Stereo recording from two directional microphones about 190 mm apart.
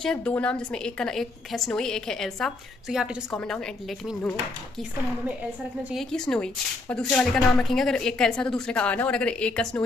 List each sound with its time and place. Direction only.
0.0 s speech: 5° left (ahead or behind)
5.9 s speech: 5° left (ahead or behind)